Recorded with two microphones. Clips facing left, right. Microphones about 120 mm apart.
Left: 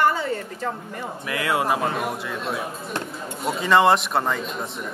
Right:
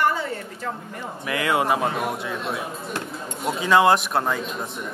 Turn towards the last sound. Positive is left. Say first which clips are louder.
# even
turn(degrees=0)  # may be behind; listen again after turning